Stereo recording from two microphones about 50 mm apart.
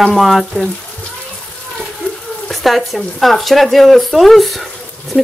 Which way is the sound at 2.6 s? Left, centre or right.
Centre.